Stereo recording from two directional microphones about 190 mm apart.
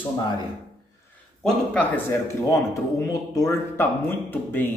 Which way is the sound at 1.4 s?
5° left (ahead or behind).